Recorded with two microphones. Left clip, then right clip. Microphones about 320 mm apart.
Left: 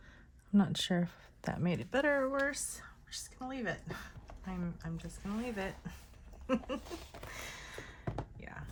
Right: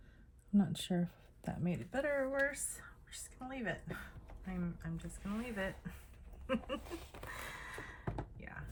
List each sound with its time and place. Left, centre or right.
0.6 s speech: centre
1.6 s speech: centre
3.1 s speech: centre
6.5 s a sound: centre